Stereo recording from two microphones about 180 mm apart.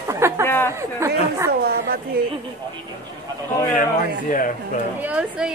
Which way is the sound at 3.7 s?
45° left (ahead or behind).